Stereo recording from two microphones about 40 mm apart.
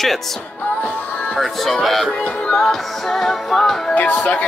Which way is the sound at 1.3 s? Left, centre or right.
Centre.